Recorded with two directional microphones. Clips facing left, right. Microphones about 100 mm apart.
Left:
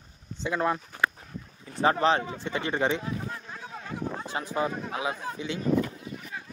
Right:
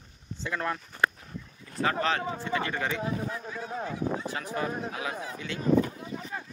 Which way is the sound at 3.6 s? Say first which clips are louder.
Right 6 dB; 50° right (ahead or behind).